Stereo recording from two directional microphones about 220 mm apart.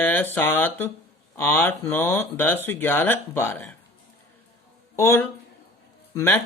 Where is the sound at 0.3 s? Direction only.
10° left (ahead or behind).